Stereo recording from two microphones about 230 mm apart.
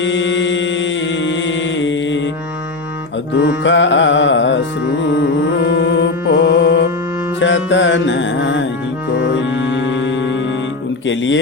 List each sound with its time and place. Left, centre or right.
0.0 s music: left
3.3 s music: left
11.0 s speech: left